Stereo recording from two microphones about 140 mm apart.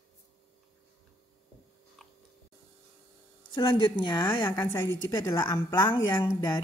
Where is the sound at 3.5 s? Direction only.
35° left (ahead or behind).